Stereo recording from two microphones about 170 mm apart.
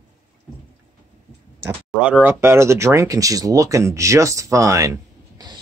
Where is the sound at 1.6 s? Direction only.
10° right (ahead or behind).